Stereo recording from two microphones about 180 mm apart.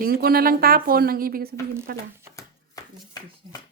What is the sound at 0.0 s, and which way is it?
Speech, 55° right (ahead or behind).